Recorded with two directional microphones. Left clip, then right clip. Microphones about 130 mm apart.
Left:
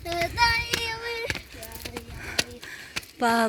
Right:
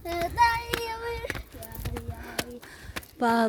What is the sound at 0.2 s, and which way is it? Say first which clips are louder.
Child singing: even; 35° right (ahead or behind).